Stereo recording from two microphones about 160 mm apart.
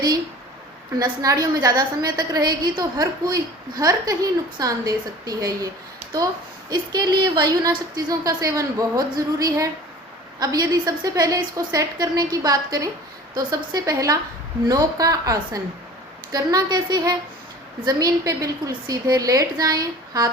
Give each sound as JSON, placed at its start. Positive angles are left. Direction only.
{"t": 0.9, "sound": "a woman's voice", "side_deg": -20}